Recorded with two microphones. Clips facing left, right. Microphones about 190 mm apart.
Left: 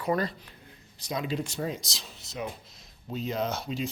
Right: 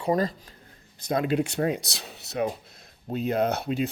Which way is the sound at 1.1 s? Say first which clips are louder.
Right 7 dB; 55° right (ahead or behind).